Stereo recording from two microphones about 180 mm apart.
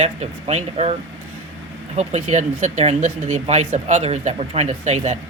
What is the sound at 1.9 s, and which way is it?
Speech, 40° right (ahead or behind).